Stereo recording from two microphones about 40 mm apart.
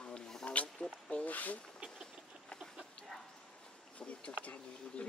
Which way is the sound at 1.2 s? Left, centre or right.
Left.